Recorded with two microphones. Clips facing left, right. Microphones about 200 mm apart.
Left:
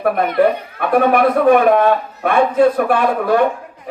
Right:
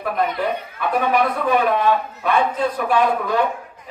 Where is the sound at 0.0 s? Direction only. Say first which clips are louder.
Left 8 dB; 60° left (ahead or behind).